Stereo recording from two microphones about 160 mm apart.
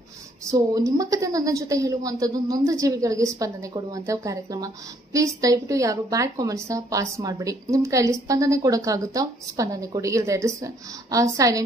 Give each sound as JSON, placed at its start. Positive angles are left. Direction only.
{"t": 0.5, "sound": "a woman's voice", "side_deg": -20}